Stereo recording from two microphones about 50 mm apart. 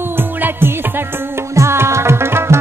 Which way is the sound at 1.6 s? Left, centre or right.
Right.